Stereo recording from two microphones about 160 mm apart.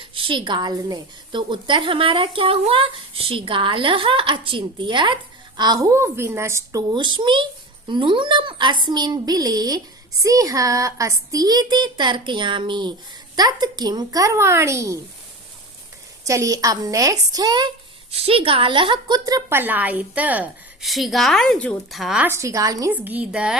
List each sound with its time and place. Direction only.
0.0 s a woman's voice: 35° right (ahead or behind); by 6.8 s 15° right (ahead or behind)
6.9 s speech: 30° right (ahead or behind)
16.2 s speech: 20° right (ahead or behind)
18.1 s a woman's voice: 35° right (ahead or behind); by 22.3 s 5° right (ahead or behind)
22.3 s speech: 20° right (ahead or behind)
22.9 s a woman's voice: 10° right (ahead or behind)